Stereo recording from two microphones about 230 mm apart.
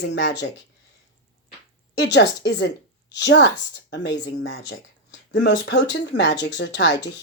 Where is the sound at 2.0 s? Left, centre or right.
Left.